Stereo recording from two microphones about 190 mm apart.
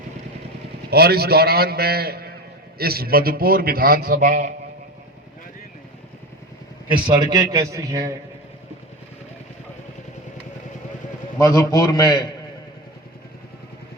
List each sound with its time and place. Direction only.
0.9 s a man's voice: 55° right (ahead or behind)
6.9 s a man's voice: 25° right (ahead or behind)
11.3 s a man's voice: 15° left (ahead or behind)